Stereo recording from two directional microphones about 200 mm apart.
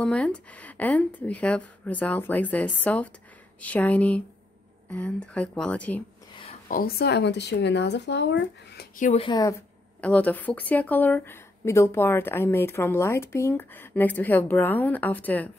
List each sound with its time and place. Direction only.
0.0 s speech: 5° left (ahead or behind)
6.7 s speech: 50° left (ahead or behind)
8.9 s speech: 40° left (ahead or behind)
9.2 s speech: 20° left (ahead or behind)
9.9 s speech: 5° left (ahead or behind)